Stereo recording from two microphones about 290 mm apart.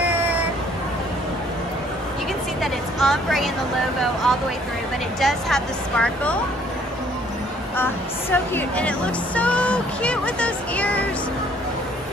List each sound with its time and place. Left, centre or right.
2.6 s speech: centre
7.7 s speech: centre